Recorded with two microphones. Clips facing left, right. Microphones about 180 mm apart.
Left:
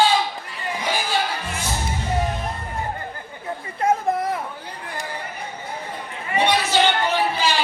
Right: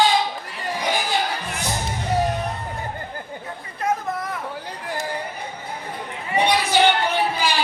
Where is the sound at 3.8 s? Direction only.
30° left (ahead or behind).